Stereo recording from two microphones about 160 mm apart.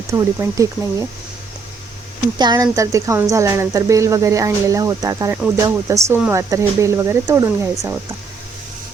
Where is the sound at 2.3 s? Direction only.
25° right (ahead or behind).